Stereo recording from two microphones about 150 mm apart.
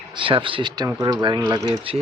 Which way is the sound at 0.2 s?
35° right (ahead or behind).